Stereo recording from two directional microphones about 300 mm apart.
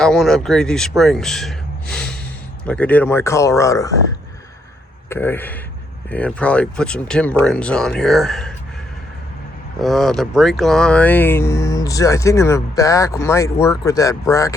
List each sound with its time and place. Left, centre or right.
0.0 s speech: centre
5.0 s speech: centre
9.8 s speech: centre